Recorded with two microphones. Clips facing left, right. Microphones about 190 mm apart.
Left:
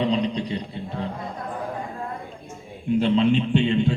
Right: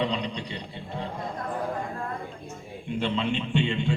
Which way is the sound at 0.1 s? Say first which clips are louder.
Left 7 dB; 35° left (ahead or behind).